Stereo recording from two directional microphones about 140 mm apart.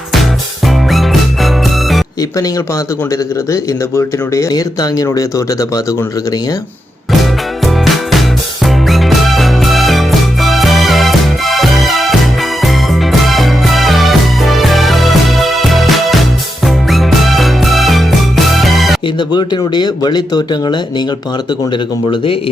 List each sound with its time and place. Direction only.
0.1 s music: centre (ahead or behind)
3.1 s speech: 20° left (ahead or behind)
7.2 s music: centre (ahead or behind)
19.0 s speech: 35° left (ahead or behind)
22.1 s speech: 40° left (ahead or behind)